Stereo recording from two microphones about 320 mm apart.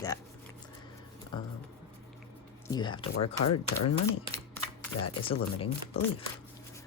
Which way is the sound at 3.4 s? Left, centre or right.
Left.